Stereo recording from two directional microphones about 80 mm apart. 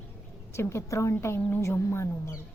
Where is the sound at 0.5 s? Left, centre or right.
Left.